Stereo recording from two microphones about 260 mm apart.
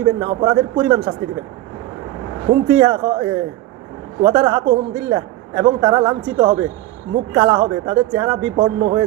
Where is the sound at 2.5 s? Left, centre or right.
Centre.